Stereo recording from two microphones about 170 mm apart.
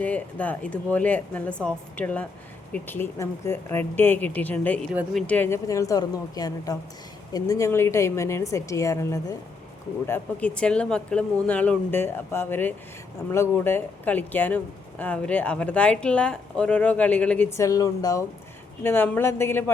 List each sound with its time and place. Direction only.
0.0 s a woman's voice: 10° left (ahead or behind)
10.1 s speech: 10° left (ahead or behind)